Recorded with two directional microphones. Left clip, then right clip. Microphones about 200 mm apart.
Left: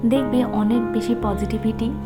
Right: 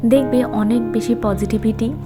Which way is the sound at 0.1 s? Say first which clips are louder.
Right 6 dB; 15° right (ahead or behind).